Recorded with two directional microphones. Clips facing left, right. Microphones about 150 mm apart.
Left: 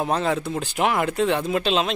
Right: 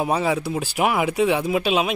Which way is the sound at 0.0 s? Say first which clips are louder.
Right 1 dB; 5° right (ahead or behind).